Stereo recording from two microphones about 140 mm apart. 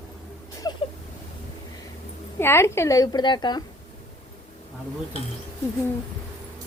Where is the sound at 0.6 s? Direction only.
30° left (ahead or behind).